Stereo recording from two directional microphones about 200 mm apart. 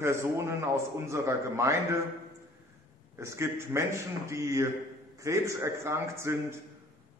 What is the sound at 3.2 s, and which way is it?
A man's voice, 15° right (ahead or behind).